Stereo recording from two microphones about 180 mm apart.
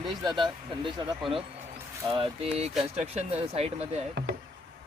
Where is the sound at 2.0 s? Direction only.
25° right (ahead or behind).